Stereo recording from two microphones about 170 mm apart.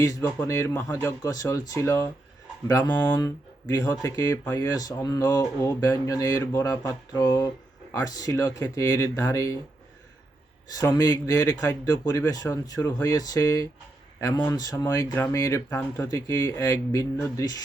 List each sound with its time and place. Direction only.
0.0 s speech: 20° left (ahead or behind)
3.2 s speech: 20° left (ahead or behind)
10.8 s speech: 20° left (ahead or behind)